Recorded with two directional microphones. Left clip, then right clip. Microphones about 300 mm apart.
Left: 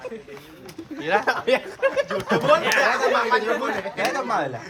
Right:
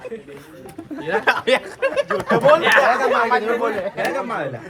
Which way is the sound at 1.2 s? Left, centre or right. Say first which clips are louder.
Right 4 dB; right.